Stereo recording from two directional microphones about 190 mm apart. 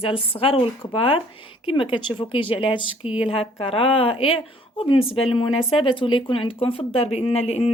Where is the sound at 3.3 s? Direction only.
30° left (ahead or behind).